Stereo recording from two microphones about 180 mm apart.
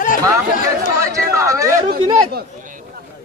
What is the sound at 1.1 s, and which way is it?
Speech, 15° right (ahead or behind).